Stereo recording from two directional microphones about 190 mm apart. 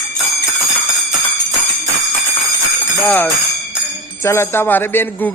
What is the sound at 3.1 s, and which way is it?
A man's voice, 10° left (ahead or behind).